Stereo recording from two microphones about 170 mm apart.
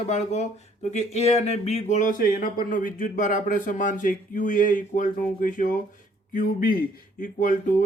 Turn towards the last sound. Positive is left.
turn(degrees=55)  # may be behind; listen again after turning